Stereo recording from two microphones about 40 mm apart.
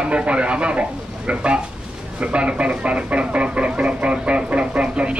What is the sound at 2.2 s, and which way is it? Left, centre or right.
Speech, right.